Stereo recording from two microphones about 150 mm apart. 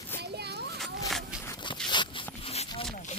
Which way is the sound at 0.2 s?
90° right.